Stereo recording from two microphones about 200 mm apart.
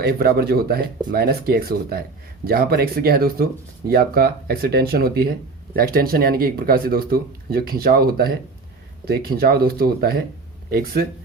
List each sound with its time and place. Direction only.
0.0 s speech: 50° right (ahead or behind)